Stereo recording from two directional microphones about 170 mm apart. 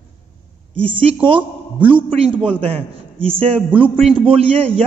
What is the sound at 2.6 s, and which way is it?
A man's voice, 35° right (ahead or behind).